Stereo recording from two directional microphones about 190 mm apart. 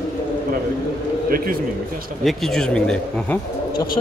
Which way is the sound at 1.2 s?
50° right (ahead or behind).